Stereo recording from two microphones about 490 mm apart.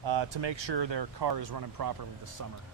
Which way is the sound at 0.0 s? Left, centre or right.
Right.